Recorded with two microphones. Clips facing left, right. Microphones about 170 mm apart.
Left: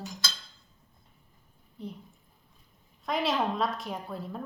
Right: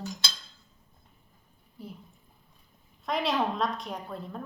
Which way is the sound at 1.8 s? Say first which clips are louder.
Left 3 dB; 5° right (ahead or behind).